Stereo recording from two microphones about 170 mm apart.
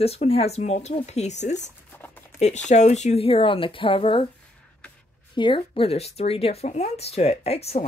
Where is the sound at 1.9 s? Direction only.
10° left (ahead or behind).